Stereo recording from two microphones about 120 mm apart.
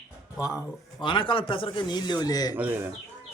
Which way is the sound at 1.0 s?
45° left (ahead or behind).